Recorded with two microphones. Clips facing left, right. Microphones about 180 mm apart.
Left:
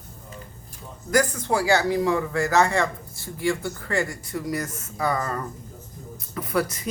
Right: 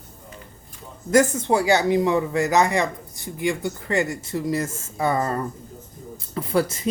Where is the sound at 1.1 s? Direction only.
25° right (ahead or behind).